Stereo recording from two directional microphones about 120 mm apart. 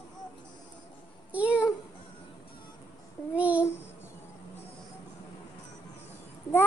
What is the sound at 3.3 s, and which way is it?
Babbling, 10° right (ahead or behind).